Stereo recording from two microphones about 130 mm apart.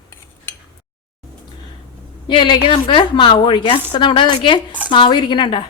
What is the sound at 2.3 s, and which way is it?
Speech, 40° left (ahead or behind).